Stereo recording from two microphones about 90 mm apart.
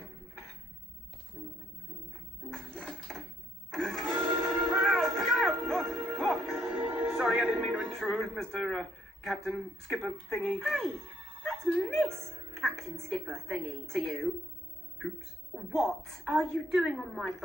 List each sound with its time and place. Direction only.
2.5 s music: 10° left (ahead or behind)
3.7 s a sound: 5° left (ahead or behind)
4.0 s music: 20° right (ahead or behind)
4.8 s music: 5° left (ahead or behind)
5.8 s music: 25° right (ahead or behind)
6.1 s music: 5° left (ahead or behind)
6.7 s music: 20° right (ahead or behind)
8.0 s speech: 5° left (ahead or behind); by 10.1 s 10° right (ahead or behind)
10.3 s a woman's voice: 5° left (ahead or behind)
11.0 s music: 5° left (ahead or behind)
13.0 s a woman's voice: 5° left (ahead or behind)
15.5 s a woman's voice: centre (ahead or behind)